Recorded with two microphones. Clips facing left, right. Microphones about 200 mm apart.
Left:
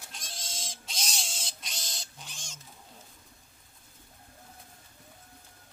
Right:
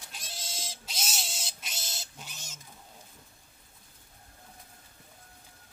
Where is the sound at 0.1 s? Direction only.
5° right (ahead or behind).